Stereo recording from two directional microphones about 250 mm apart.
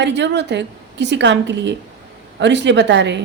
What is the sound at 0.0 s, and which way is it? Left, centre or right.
A woman's voice, right.